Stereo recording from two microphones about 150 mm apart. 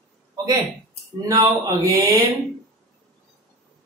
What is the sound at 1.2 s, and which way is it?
Speech, 25° right (ahead or behind).